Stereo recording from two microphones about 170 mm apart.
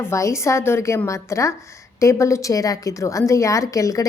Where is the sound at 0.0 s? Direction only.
15° left (ahead or behind).